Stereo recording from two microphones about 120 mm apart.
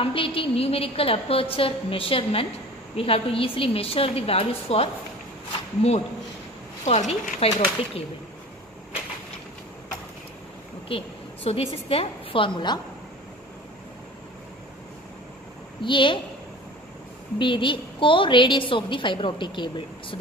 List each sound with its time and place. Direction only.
0.0 s a woman's voice: 50° left (ahead or behind)
10.9 s a woman's voice: 50° left (ahead or behind)
15.8 s a woman's voice: 45° left (ahead or behind)
17.4 s a woman's voice: 45° left (ahead or behind)